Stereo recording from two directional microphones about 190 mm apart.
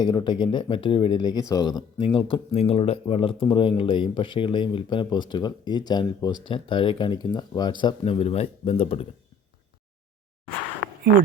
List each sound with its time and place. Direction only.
0.0 s speech: 20° left (ahead or behind)